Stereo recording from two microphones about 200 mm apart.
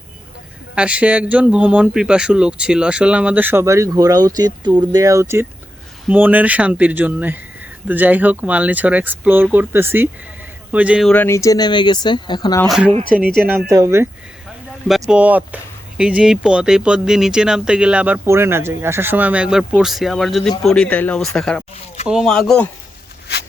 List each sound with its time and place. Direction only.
0.8 s speech: 5° right (ahead or behind)
11.1 s speech: 10° left (ahead or behind)
12.6 s speech: centre (ahead or behind)
14.8 s speech: centre (ahead or behind)